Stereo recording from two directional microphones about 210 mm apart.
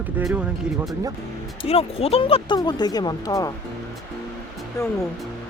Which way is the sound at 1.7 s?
30° left (ahead or behind).